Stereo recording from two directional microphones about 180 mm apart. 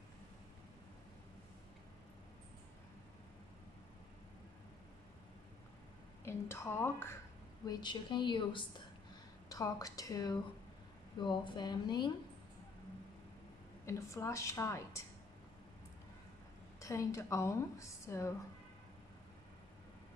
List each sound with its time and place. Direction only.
6.2 s a woman's voice: 15° left (ahead or behind)
7.6 s a woman's voice: 25° left (ahead or behind)
13.8 s a woman's voice: 15° left (ahead or behind)
16.8 s a woman's voice: 15° left (ahead or behind)